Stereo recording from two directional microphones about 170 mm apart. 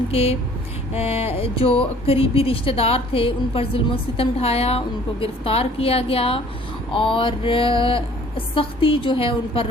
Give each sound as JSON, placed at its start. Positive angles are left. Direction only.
{"t": 0.1, "sound": "speech", "side_deg": 35}